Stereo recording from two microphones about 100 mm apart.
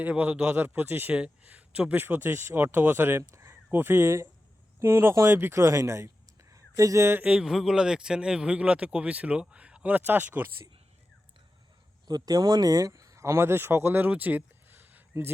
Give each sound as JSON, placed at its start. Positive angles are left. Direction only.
{"t": 0.0, "sound": "speech", "side_deg": -15}
{"t": 7.2, "sound": "speech", "side_deg": -10}
{"t": 12.0, "sound": "speech", "side_deg": -40}